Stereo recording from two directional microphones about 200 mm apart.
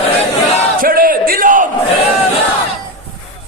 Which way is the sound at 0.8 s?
45° right (ahead or behind).